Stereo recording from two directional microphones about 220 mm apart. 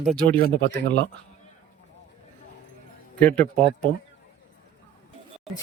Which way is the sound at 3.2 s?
5° left (ahead or behind).